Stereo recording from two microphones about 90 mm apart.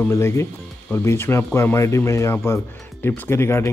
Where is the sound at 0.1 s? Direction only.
30° left (ahead or behind).